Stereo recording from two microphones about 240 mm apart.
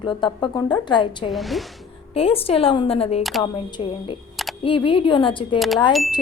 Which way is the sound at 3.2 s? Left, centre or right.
Centre.